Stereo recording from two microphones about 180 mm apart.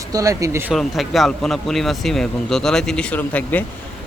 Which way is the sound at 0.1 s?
20° right (ahead or behind).